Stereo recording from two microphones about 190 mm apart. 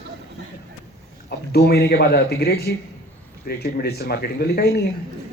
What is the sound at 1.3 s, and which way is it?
Speech, 55° left (ahead or behind).